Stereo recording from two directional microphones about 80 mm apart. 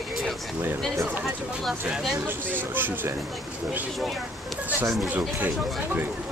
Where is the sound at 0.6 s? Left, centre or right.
Right.